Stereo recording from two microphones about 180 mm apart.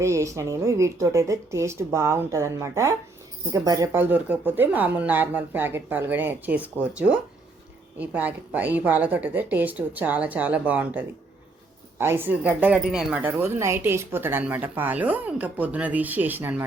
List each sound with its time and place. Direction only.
0.0 s a woman's voice: 15° right (ahead or behind)
7.9 s a woman's voice: 10° right (ahead or behind)